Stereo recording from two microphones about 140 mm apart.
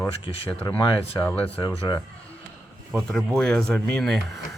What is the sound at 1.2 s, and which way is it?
Speech, 10° left (ahead or behind).